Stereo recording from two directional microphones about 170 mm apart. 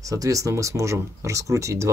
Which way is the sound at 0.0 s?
20° right (ahead or behind).